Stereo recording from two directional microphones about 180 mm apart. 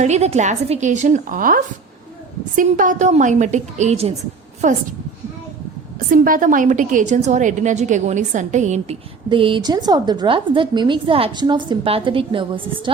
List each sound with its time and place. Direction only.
0.0 s a woman's voice: 40° right (ahead or behind)
6.1 s a woman's voice: 50° right (ahead or behind); by 12.9 s 30° right (ahead or behind)